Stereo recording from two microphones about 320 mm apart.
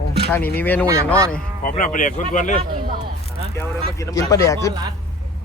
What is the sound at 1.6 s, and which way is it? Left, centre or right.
Speech, left.